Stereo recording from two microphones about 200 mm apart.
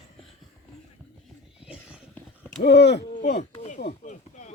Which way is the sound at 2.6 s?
60° left (ahead or behind).